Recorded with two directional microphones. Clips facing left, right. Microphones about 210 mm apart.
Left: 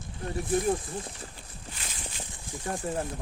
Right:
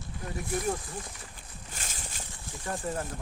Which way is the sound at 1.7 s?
45° right (ahead or behind).